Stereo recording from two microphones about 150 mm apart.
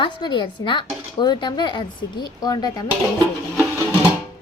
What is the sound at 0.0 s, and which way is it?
Speech, 30° left (ahead or behind).